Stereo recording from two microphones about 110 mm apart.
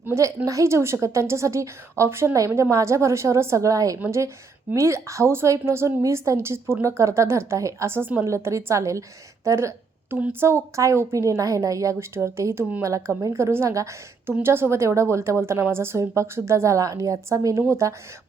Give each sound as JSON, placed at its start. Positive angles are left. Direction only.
{"t": 0.0, "sound": "a woman's voice", "side_deg": -25}